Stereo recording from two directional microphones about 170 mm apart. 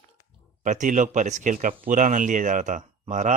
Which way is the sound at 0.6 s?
50° right (ahead or behind).